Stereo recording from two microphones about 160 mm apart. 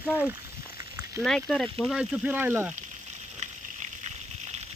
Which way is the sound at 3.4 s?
45° right (ahead or behind).